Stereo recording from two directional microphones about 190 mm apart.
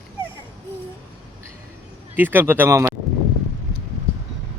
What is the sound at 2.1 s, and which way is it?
Speech, 10° right (ahead or behind).